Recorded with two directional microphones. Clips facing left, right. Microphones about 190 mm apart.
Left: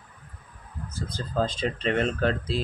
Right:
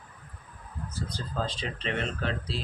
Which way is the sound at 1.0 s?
45° left (ahead or behind).